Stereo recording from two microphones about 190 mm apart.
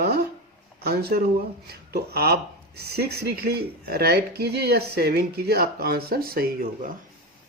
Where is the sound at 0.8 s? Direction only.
55° right (ahead or behind).